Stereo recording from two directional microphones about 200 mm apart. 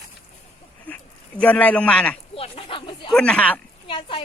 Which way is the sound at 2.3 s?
30° left (ahead or behind).